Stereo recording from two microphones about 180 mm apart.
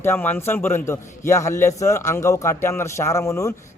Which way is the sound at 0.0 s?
10° left (ahead or behind).